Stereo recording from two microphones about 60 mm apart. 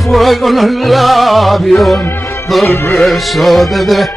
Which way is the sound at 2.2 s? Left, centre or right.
Left.